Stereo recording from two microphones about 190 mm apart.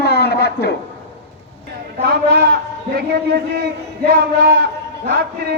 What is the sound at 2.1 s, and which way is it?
Speech, 60° right (ahead or behind).